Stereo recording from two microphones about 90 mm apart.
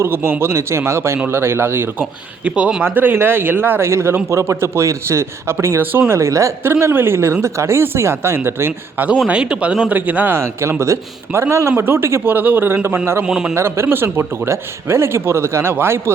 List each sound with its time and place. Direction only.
0.0 s a man's voice: 25° right (ahead or behind)
2.4 s a man's voice: 10° right (ahead or behind); by 9.0 s 25° right (ahead or behind)
9.2 s a man's voice: 10° right (ahead or behind)
13.2 s speech: 10° right (ahead or behind)
13.5 s a man's voice: 30° right (ahead or behind)